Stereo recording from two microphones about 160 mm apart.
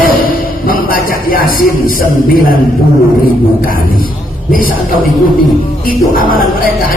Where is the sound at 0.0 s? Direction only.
60° left (ahead or behind).